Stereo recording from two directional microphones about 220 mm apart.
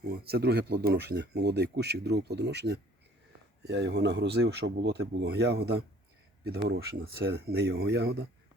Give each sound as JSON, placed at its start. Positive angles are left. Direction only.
{"t": 0.3, "sound": "speech", "side_deg": -45}